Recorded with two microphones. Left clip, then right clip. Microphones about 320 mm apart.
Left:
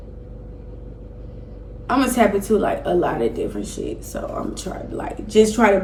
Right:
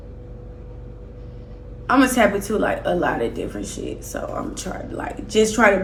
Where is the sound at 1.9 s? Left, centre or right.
Centre.